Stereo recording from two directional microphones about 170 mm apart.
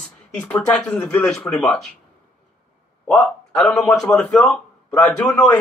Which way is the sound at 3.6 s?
5° left (ahead or behind).